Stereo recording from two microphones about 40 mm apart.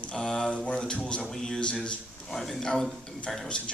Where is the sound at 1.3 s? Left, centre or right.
Centre.